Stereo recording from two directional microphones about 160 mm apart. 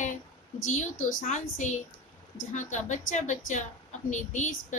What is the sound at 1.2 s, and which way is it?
Speech, 50° left (ahead or behind).